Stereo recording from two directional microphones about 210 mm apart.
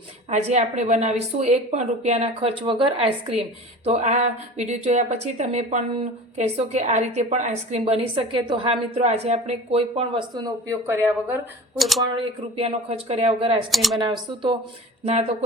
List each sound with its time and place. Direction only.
0.3 s a woman's voice: 35° right (ahead or behind); by 11.3 s 10° right (ahead or behind)
11.8 s speech: centre (ahead or behind)
12.1 s a woman's voice: 25° right (ahead or behind)
13.7 s speech: centre (ahead or behind)
14.0 s a woman's voice: 25° right (ahead or behind)